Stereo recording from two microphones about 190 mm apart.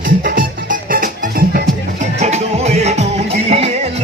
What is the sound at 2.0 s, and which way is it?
Music, 35° right (ahead or behind).